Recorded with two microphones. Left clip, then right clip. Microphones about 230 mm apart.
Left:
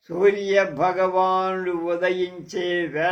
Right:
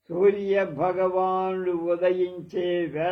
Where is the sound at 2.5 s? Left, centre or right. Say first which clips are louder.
Left 4 dB; left.